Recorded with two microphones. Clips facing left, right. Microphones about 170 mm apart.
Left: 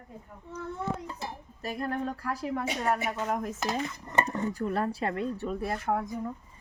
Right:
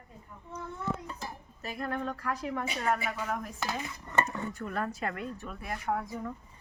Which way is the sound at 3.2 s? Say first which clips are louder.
Left 4 dB; 20° left (ahead or behind).